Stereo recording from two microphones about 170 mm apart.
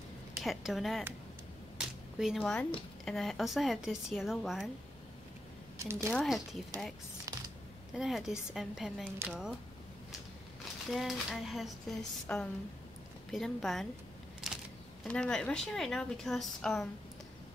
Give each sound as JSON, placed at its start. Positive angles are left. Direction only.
{"t": 0.4, "sound": "a woman's voice", "side_deg": 0}
{"t": 1.8, "sound": "a sound", "side_deg": -5}
{"t": 3.1, "sound": "a woman's voice", "side_deg": 0}
{"t": 5.8, "sound": "speech", "side_deg": -15}
{"t": 6.1, "sound": "a woman's voice", "side_deg": 0}
{"t": 7.3, "sound": "mechanisms", "side_deg": -20}
{"t": 7.9, "sound": "a woman's voice", "side_deg": 0}
{"t": 10.9, "sound": "a woman's voice", "side_deg": 0}
{"t": 14.5, "sound": "a sound", "side_deg": 0}
{"t": 15.0, "sound": "a woman's voice", "side_deg": 5}